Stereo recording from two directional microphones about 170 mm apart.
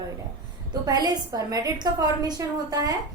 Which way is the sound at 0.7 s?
25° right (ahead or behind).